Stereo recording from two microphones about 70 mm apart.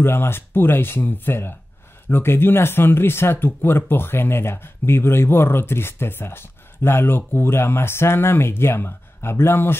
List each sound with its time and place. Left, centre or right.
0.0 s speech: left